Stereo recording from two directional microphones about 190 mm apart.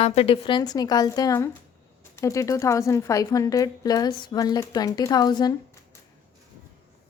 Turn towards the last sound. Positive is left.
turn(degrees=20)  # may be behind; listen again after turning